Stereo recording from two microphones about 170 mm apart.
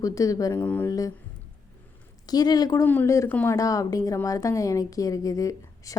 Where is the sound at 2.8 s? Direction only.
10° left (ahead or behind).